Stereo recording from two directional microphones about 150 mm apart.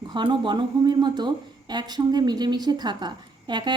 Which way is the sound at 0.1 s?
30° right (ahead or behind).